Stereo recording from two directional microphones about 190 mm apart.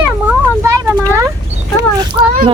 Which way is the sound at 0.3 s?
15° right (ahead or behind).